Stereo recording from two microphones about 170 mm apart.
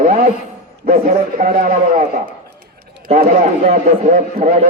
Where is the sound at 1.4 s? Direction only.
55° right (ahead or behind).